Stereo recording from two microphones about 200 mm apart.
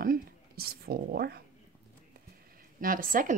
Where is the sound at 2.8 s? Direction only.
45° right (ahead or behind).